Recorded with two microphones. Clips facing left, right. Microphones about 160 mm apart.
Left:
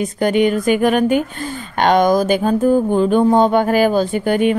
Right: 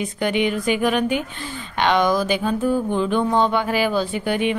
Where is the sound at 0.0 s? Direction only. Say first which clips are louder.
Left 6 dB; 45° left (ahead or behind).